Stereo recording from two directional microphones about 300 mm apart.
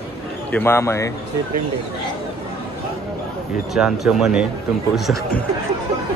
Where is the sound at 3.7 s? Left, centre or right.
Centre.